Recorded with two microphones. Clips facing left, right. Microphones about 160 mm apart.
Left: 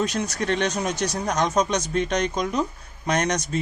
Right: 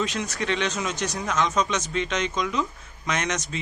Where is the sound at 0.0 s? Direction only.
40° left (ahead or behind).